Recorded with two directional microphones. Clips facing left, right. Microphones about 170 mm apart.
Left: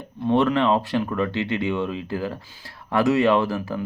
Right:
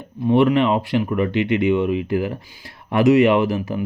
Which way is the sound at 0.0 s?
15° right (ahead or behind).